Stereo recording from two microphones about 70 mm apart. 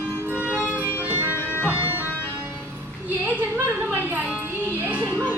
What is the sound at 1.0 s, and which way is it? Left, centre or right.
Music, right.